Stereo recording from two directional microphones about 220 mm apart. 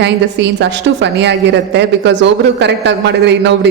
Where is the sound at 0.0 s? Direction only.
50° right (ahead or behind).